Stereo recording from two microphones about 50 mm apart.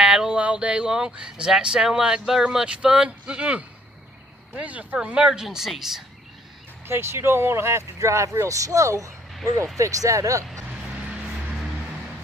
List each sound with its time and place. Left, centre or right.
0.0 s a sound: centre
0.4 s speech: right
5.4 s speech: centre
6.9 s speech: right